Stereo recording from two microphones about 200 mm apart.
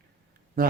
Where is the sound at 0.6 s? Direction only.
45° right (ahead or behind).